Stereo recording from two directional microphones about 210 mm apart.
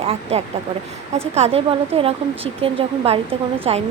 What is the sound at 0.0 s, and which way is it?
A woman's voice, 30° right (ahead or behind).